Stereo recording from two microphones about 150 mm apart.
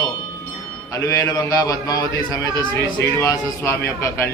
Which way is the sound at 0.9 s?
20° left (ahead or behind).